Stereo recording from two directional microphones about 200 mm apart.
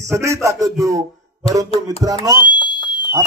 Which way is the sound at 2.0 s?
20° right (ahead or behind).